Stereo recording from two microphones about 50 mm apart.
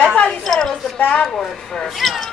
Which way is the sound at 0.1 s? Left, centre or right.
Centre.